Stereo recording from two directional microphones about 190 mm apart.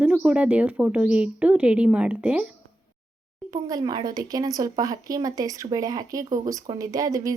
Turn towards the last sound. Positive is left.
turn(degrees=-20)  # may be behind; listen again after turning